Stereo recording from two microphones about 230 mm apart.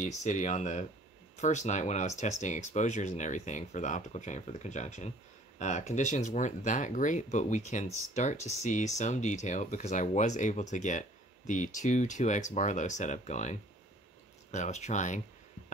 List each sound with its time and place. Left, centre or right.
0.2 s speech: left